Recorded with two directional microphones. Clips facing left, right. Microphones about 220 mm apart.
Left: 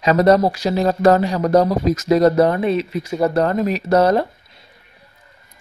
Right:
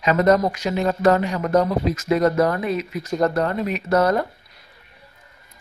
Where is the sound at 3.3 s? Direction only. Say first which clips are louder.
Left 5 dB; 40° left (ahead or behind).